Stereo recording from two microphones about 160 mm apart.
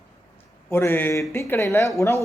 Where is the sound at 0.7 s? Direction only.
15° left (ahead or behind).